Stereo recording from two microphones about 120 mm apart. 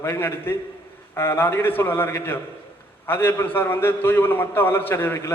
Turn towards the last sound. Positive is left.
turn(degrees=20)  # may be behind; listen again after turning